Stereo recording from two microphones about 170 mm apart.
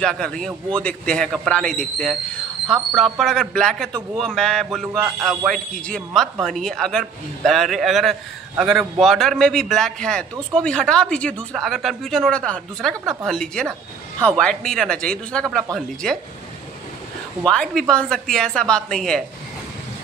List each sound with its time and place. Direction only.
0.0 s speech: 5° left (ahead or behind)
17.5 s speech: 5° left (ahead or behind)